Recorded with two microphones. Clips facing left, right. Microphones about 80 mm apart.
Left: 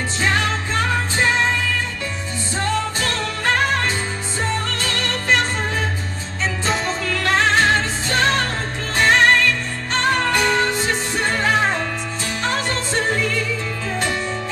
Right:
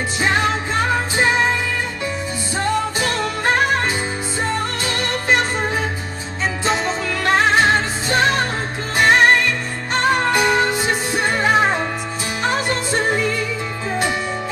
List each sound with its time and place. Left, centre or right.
0.2 s music: centre
2.5 s music: centre
6.6 s music: centre
7.1 s music: centre